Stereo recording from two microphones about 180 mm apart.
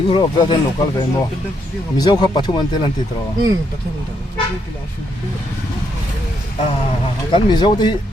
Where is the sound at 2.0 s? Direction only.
20° left (ahead or behind).